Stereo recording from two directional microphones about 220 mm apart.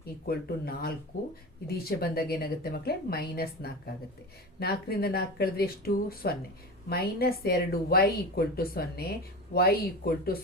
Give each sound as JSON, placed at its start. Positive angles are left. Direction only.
{"t": 0.0, "sound": "a woman's voice", "side_deg": 45}